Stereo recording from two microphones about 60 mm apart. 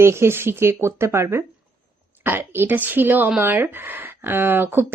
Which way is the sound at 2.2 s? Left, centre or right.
Right.